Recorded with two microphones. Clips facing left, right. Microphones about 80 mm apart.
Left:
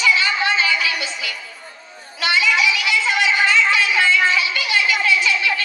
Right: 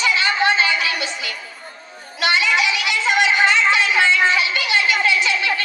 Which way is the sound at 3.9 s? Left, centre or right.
Right.